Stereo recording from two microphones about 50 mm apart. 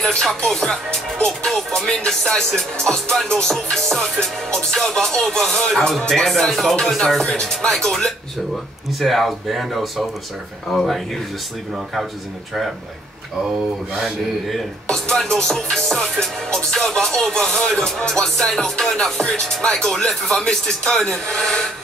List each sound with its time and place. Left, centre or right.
0.1 s music: centre
0.5 s speech: centre
1.1 s music: centre
9.0 s speech: centre
14.5 s music: centre